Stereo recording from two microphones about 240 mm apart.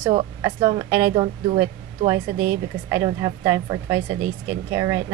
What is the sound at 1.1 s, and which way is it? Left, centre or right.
A woman's voice, right.